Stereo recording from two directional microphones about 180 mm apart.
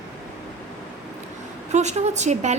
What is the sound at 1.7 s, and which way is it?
Speech, 40° right (ahead or behind).